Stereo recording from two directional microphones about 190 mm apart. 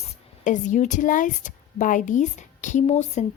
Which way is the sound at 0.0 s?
40° left (ahead or behind).